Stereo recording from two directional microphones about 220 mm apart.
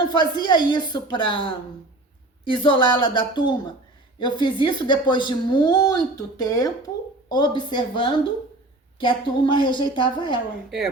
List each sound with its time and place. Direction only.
0.1 s speech: 20° left (ahead or behind)